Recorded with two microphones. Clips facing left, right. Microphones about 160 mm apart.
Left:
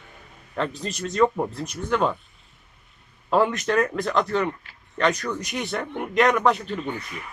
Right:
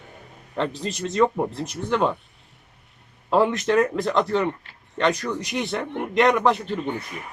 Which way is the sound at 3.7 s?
25° right (ahead or behind).